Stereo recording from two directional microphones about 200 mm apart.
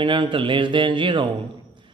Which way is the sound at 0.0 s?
25° right (ahead or behind).